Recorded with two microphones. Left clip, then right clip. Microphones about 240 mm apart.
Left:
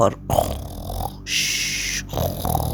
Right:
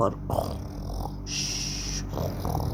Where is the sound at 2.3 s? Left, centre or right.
Left.